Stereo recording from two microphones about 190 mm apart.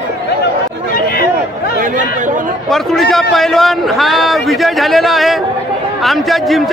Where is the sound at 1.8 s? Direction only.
40° right (ahead or behind).